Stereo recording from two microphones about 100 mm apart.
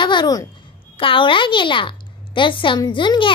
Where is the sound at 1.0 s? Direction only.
60° left (ahead or behind).